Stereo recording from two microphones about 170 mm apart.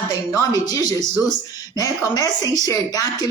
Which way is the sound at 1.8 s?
20° left (ahead or behind).